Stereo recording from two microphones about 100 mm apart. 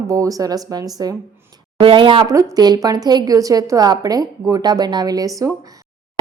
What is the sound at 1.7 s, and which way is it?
Speech, 60° right (ahead or behind).